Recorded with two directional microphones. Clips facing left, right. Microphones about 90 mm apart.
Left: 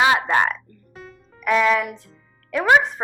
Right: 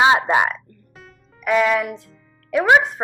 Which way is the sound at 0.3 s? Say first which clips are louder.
Right 1 dB; 10° right (ahead or behind).